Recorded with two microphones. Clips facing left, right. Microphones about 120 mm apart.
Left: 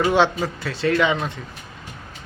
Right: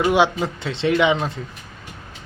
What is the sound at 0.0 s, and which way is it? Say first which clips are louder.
Speech: right 1 dB; 10° right (ahead or behind).